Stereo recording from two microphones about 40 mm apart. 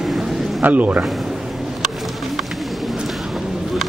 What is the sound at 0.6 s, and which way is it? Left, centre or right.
Speech, right.